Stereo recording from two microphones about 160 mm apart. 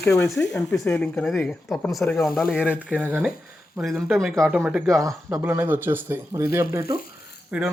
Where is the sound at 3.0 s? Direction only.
10° right (ahead or behind).